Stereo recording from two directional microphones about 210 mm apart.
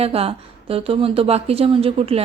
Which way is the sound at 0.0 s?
30° right (ahead or behind).